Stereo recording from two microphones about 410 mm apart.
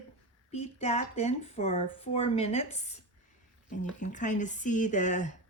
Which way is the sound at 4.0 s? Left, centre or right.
Centre.